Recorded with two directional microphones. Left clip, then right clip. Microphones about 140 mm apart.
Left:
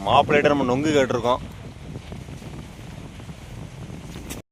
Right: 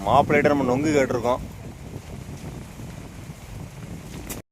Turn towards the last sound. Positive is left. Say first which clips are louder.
# even
turn(degrees=0)  # may be behind; listen again after turning